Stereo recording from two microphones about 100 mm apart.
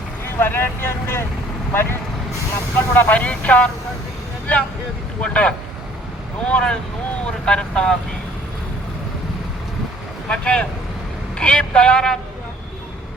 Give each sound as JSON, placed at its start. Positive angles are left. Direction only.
{"t": 0.3, "sound": "speech", "side_deg": 20}
{"t": 5.2, "sound": "speech", "side_deg": 10}
{"t": 10.2, "sound": "speech", "side_deg": 10}